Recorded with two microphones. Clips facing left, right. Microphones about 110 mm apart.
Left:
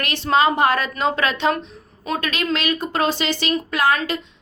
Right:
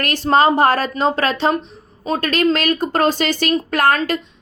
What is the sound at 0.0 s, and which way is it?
A woman's voice, 45° right (ahead or behind).